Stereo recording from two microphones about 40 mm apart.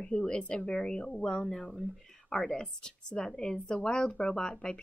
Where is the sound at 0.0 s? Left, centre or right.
Left.